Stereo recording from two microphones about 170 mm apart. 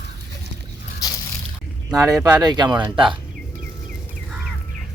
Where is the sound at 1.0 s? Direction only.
20° left (ahead or behind).